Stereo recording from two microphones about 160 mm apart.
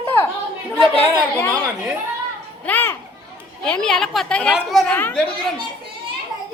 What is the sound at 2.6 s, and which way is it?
Children playing, 10° left (ahead or behind).